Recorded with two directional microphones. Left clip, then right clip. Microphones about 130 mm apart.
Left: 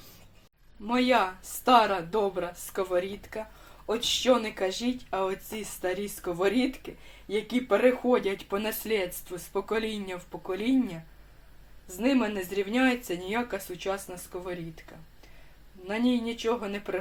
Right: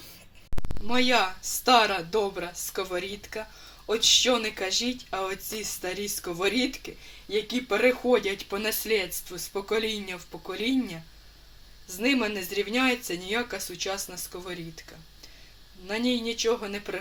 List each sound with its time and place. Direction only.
0.9 s speech: 10° left (ahead or behind)
11.9 s speech: 10° left (ahead or behind)
15.9 s speech: 10° left (ahead or behind)